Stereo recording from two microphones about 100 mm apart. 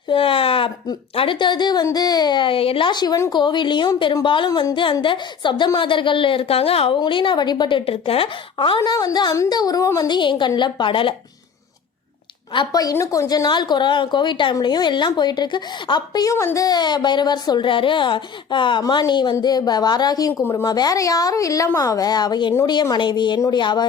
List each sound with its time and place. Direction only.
0.1 s a sound: 65° left (ahead or behind)
1.1 s a woman's voice: 60° left (ahead or behind)
7.0 s speech: 55° left (ahead or behind); by 8.3 s 70° left (ahead or behind)
8.5 s a woman's voice: 55° left (ahead or behind); by 10.1 s 35° left (ahead or behind)
10.1 s a woman's voice: 50° left (ahead or behind)
12.5 s a woman's voice: 40° left (ahead or behind)
16.3 s a child's voice: 30° left (ahead or behind)
16.6 s a woman's voice: 45° left (ahead or behind)
20.4 s a child's voice: 25° left (ahead or behind)
20.7 s a woman's voice: 40° left (ahead or behind)